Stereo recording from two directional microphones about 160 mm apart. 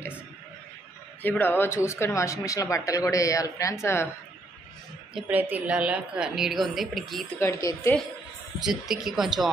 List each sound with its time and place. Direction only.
1.2 s speech: 10° left (ahead or behind)
5.1 s a woman's voice: 10° right (ahead or behind)
7.3 s speech: 20° left (ahead or behind)
8.5 s a woman's voice: 5° right (ahead or behind)